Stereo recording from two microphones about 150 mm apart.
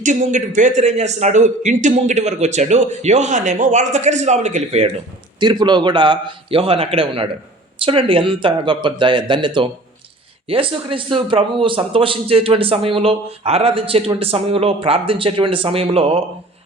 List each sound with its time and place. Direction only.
0.0 s a man's voice: 55° right (ahead or behind)
5.4 s a man's voice: 30° right (ahead or behind)